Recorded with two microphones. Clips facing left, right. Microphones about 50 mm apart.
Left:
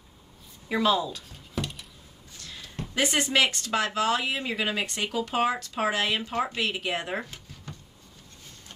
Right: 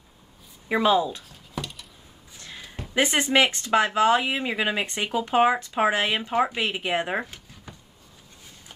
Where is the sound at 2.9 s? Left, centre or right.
Right.